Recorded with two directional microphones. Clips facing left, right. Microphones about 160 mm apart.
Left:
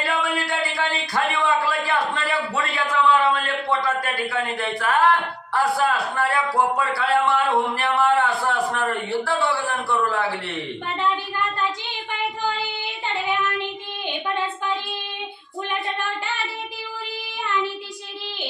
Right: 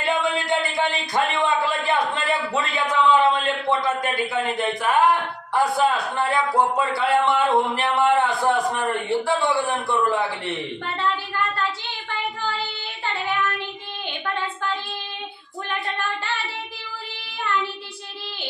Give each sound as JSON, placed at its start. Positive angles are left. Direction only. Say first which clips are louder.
{"t": 0.0, "sound": "a sound", "louder": "right 2 dB", "side_deg": -20}
{"t": 3.8, "sound": "a man's voice", "louder": "right 1 dB", "side_deg": -20}
{"t": 12.1, "sound": "child singing", "louder": "left 2 dB", "side_deg": 15}